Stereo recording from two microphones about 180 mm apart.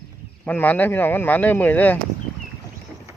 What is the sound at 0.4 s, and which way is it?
Speech, 10° left (ahead or behind).